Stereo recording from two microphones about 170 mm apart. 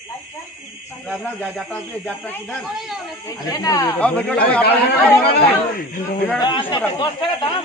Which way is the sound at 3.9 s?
5° left (ahead or behind).